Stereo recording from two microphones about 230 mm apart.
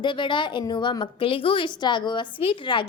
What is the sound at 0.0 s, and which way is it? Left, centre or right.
A woman's voice, left.